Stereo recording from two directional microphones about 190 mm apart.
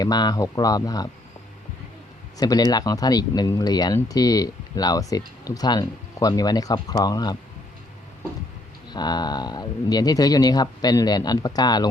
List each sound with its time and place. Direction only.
0.0 s speech: 20° left (ahead or behind)
2.4 s speech: 20° left (ahead or behind)
8.9 s speech: 20° left (ahead or behind)